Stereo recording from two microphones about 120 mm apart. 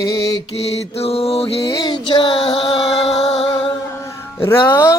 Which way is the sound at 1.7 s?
35° left (ahead or behind).